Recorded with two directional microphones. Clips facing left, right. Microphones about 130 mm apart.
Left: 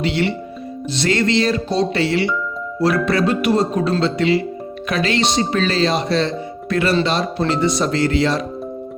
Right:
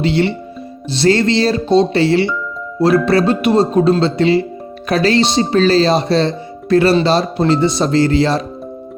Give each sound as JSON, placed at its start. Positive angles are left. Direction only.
{"t": 0.0, "sound": "speech", "side_deg": -30}